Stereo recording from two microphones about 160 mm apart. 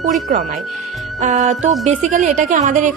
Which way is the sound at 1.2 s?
50° right (ahead or behind).